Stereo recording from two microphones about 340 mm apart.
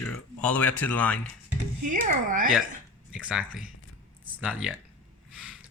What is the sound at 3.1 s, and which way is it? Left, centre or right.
Speech, centre.